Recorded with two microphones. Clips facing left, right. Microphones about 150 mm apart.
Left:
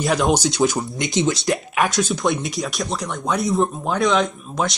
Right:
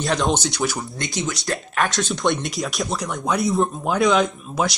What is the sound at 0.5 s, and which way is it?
Speech, 20° left (ahead or behind).